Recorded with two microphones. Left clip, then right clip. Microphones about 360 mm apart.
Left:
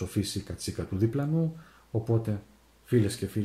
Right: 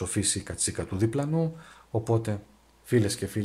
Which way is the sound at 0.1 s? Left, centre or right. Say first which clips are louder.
Right 3 dB; right.